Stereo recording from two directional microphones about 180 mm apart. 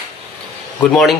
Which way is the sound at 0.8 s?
Centre (ahead or behind).